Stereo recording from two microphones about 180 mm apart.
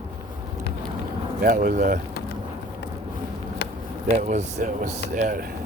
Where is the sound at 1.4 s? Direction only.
50° right (ahead or behind).